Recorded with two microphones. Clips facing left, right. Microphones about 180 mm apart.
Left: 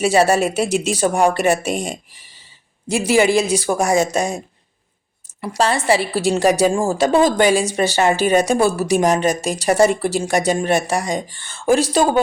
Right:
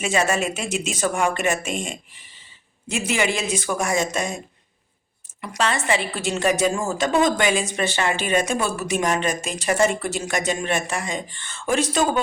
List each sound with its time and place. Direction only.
0.0 s a woman's voice: 35° left (ahead or behind)
5.4 s a woman's voice: 35° left (ahead or behind)